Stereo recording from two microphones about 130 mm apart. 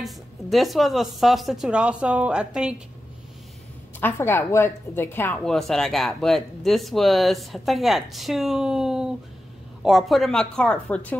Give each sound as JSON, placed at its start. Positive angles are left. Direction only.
{"t": 0.0, "sound": "speech", "side_deg": 0}
{"t": 4.0, "sound": "a woman's voice", "side_deg": 20}
{"t": 5.4, "sound": "speech", "side_deg": 5}